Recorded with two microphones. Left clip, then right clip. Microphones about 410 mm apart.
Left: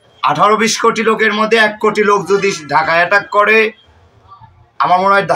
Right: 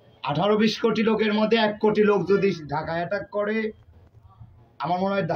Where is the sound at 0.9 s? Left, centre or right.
Right.